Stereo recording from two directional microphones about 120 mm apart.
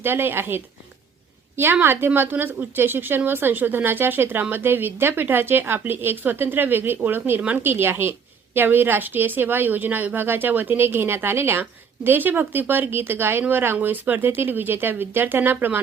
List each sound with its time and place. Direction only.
0.0 s a woman's voice: 20° right (ahead or behind)